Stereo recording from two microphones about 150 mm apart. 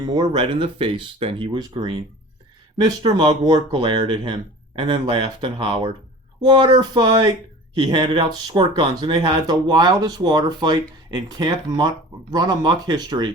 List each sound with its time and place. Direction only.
0.0 s speech: 30° right (ahead or behind)